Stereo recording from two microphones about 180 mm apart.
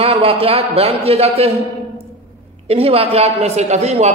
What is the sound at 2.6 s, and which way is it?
A man's voice, 35° right (ahead or behind).